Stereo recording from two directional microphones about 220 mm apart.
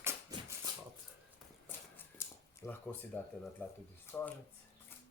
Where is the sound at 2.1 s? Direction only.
15° left (ahead or behind).